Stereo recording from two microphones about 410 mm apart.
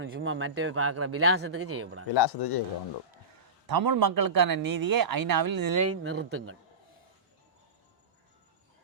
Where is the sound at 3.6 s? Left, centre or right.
Right.